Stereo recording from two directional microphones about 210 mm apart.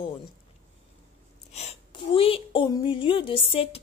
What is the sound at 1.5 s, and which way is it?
Speech, 30° left (ahead or behind).